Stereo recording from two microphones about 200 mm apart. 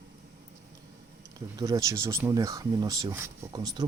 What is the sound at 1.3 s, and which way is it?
Speech, 15° right (ahead or behind).